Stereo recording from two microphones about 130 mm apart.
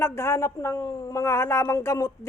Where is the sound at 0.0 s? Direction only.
20° left (ahead or behind).